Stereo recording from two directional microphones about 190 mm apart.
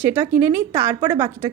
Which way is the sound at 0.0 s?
10° right (ahead or behind).